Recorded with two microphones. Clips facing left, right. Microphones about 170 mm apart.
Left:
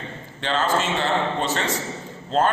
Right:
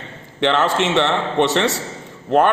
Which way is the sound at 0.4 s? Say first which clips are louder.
Right 5 dB; 75° right (ahead or behind).